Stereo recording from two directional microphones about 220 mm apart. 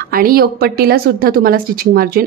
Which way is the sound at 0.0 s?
40° right (ahead or behind).